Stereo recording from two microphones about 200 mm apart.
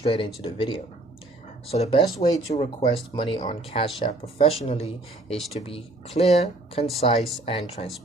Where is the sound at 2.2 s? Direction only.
20° left (ahead or behind).